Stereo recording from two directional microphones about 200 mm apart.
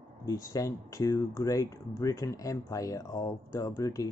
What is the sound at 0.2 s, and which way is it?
Speech, 15° left (ahead or behind).